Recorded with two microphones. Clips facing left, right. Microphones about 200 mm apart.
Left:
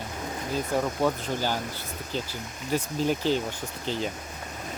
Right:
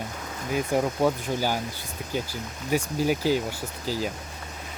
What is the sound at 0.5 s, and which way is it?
Speech, 15° right (ahead or behind).